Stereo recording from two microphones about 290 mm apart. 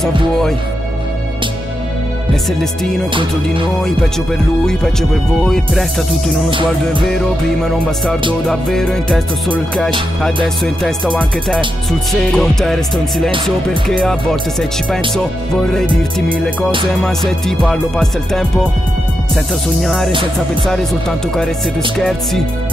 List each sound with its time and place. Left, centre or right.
2.6 s speech: centre
6.5 s music: centre
7.1 s speech: centre
19.8 s speech: centre
21.9 s speech: centre